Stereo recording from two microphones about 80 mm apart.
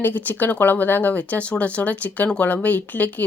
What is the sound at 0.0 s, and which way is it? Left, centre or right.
Speech, left.